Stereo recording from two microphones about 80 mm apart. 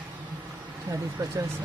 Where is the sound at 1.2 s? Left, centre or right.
Right.